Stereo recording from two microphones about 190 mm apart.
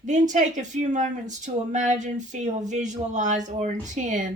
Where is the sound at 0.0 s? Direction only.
40° right (ahead or behind).